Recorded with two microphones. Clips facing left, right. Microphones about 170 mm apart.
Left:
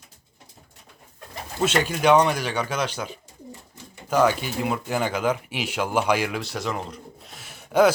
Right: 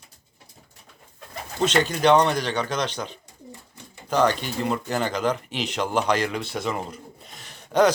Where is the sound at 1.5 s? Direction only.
5° left (ahead or behind).